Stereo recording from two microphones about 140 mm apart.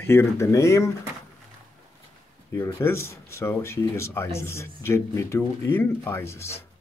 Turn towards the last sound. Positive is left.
turn(degrees=20)  # may be behind; listen again after turning